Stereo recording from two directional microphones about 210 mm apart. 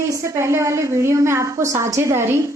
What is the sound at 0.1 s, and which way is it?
A woman's voice, 15° right (ahead or behind).